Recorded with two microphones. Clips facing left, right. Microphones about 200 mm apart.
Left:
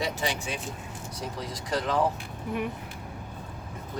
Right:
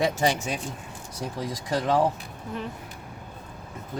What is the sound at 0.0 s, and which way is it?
Speech, 45° right (ahead or behind).